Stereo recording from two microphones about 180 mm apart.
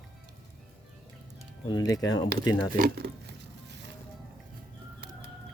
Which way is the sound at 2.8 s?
60° right (ahead or behind).